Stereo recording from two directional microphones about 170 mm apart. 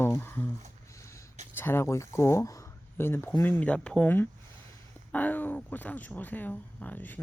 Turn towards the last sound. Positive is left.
turn(degrees=10)  # may be behind; listen again after turning